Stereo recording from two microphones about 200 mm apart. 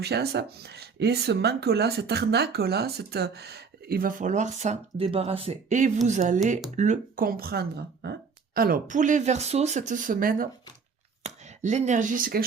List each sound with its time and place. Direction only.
0.0 s speech: 55° right (ahead or behind)